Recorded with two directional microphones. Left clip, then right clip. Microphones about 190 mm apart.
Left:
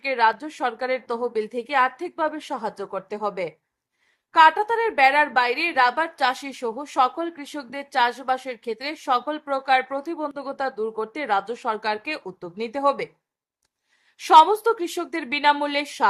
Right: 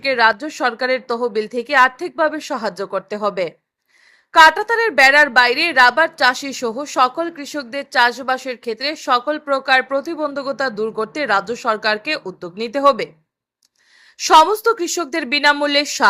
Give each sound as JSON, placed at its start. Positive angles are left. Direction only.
{"t": 0.0, "sound": "a woman's voice", "side_deg": -15}
{"t": 14.2, "sound": "a woman's voice", "side_deg": -10}